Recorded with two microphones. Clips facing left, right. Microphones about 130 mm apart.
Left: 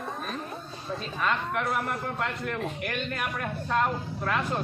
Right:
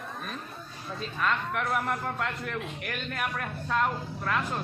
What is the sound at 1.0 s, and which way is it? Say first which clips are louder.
Speech: even; centre (ahead or behind).